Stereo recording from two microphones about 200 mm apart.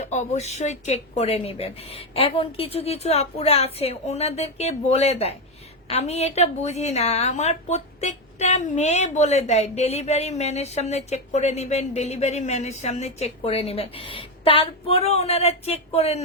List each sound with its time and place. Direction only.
0.0 s a woman's voice: 35° left (ahead or behind)